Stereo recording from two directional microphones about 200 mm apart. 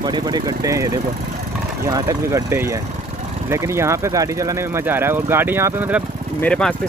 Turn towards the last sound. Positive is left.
turn(degrees=5)  # may be behind; listen again after turning